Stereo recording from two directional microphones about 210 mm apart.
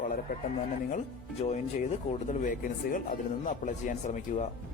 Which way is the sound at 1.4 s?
35° left (ahead or behind).